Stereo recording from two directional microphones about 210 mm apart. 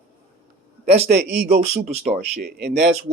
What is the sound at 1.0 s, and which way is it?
Speech, 50° right (ahead or behind).